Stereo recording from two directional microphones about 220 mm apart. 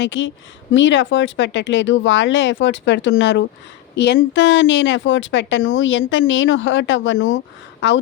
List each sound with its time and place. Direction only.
0.0 s a woman's voice: 55° left (ahead or behind)